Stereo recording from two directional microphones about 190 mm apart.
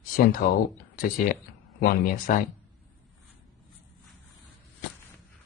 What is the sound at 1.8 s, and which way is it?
Speech, 50° left (ahead or behind).